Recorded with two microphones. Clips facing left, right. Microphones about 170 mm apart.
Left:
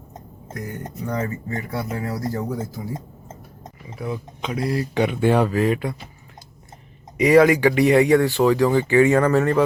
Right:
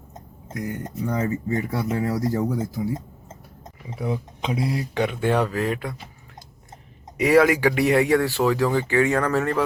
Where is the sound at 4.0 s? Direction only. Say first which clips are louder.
Right 1 dB; 30° right (ahead or behind).